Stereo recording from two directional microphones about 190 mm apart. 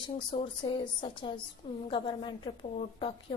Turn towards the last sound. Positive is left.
turn(degrees=25)  # may be behind; listen again after turning